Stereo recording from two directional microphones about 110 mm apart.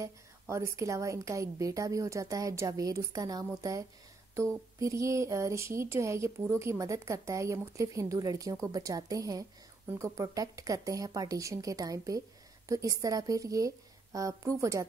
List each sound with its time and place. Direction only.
0.0 s a woman's voice: 25° right (ahead or behind)